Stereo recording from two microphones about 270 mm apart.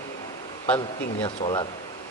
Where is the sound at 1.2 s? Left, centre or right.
Centre.